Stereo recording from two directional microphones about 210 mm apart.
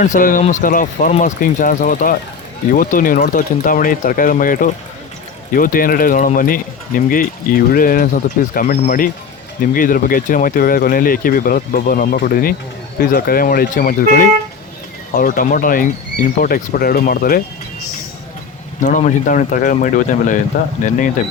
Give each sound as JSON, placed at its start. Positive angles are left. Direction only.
{"t": 0.0, "sound": "speech", "side_deg": 40}
{"t": 18.8, "sound": "speech", "side_deg": 35}